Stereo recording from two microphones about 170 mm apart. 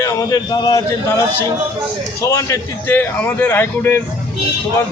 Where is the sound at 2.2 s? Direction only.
20° left (ahead or behind).